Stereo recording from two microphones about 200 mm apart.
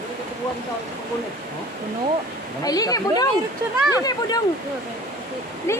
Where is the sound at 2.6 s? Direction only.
20° left (ahead or behind).